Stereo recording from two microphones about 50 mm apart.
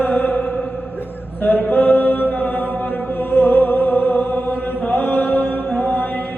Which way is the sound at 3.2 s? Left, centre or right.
Left.